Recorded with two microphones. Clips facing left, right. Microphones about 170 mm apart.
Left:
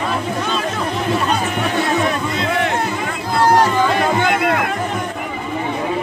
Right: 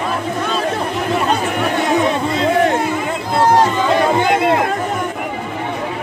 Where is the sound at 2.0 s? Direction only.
30° right (ahead or behind).